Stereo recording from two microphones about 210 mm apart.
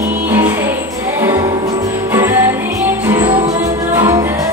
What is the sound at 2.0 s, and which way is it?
Music, 10° right (ahead or behind).